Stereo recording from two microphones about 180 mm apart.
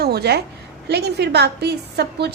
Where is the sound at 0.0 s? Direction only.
65° right (ahead or behind).